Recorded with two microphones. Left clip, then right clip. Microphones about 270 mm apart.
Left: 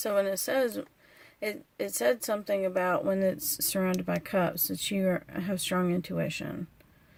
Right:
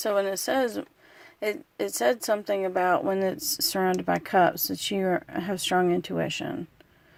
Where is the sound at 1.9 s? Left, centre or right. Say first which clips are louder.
Right 3 dB; centre.